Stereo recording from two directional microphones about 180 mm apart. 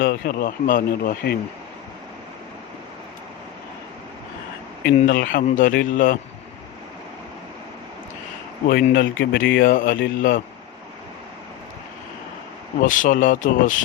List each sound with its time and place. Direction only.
0.0 s speech: 60° left (ahead or behind)
4.9 s speech: 50° left (ahead or behind)
8.6 s speech: 55° left (ahead or behind)
12.8 s speech: 45° left (ahead or behind)